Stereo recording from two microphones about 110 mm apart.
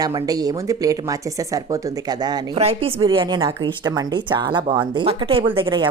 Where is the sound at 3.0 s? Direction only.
50° right (ahead or behind).